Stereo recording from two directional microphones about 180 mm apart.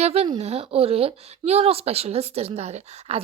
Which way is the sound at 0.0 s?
35° right (ahead or behind).